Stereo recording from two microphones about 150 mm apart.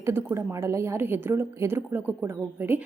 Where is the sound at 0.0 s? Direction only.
15° right (ahead or behind).